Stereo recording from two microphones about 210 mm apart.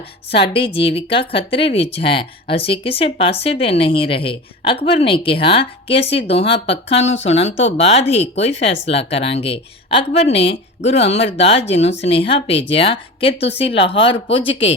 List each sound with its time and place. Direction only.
0.5 s speech: 25° left (ahead or behind)